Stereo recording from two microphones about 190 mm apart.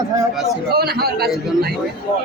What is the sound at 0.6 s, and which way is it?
A man's voice, 55° right (ahead or behind).